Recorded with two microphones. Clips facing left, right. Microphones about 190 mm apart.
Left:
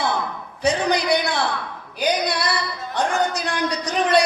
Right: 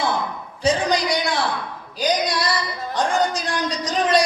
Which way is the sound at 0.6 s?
60° left (ahead or behind).